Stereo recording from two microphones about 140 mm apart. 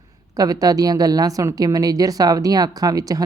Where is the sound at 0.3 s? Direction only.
25° right (ahead or behind).